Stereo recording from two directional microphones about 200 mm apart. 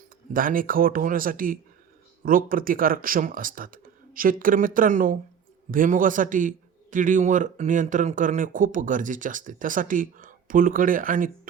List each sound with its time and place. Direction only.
0.3 s speech: 45° right (ahead or behind)